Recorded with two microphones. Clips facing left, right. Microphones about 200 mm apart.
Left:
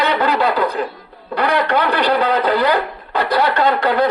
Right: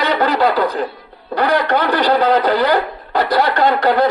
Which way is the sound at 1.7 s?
35° right (ahead or behind).